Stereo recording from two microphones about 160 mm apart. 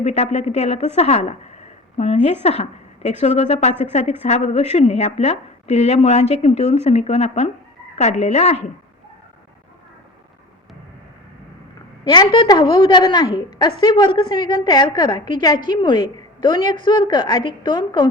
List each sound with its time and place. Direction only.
0.0 s speech: 45° left (ahead or behind)
12.0 s a woman's voice: 25° left (ahead or behind)